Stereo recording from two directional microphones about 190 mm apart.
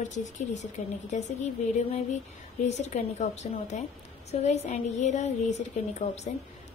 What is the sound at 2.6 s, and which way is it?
A woman's voice, 35° left (ahead or behind).